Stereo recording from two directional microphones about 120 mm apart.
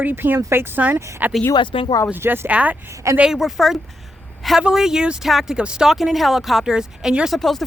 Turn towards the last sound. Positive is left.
turn(degrees=0)  # may be behind; listen again after turning